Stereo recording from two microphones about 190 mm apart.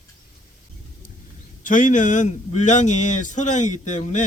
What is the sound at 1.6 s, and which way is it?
A man's voice, 40° left (ahead or behind).